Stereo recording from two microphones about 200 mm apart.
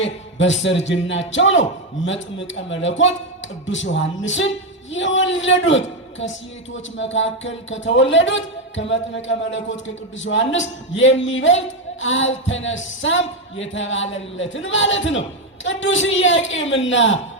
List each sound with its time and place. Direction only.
0.0 s speech: 65° left (ahead or behind)